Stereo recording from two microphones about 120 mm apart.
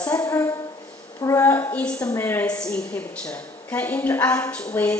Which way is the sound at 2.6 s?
10° left (ahead or behind).